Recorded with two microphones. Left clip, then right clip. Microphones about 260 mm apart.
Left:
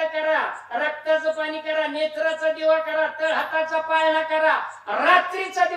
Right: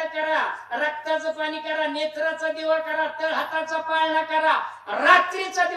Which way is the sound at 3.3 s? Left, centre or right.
Centre.